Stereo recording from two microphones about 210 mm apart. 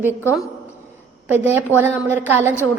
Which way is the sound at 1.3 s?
10° right (ahead or behind).